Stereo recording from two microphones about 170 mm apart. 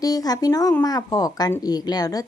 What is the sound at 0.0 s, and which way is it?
A woman's voice, 20° left (ahead or behind).